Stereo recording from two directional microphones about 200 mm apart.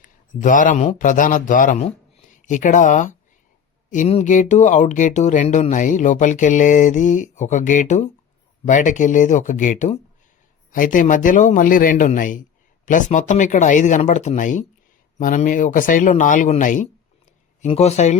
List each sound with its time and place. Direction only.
0.0 s a man's voice: 40° left (ahead or behind)